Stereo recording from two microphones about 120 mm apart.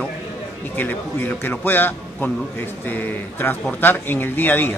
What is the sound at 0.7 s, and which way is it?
Speech, 15° left (ahead or behind).